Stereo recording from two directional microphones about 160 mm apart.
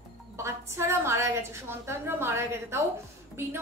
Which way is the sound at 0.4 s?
15° right (ahead or behind).